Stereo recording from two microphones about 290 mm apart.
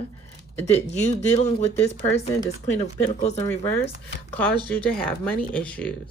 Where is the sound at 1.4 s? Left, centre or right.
Left.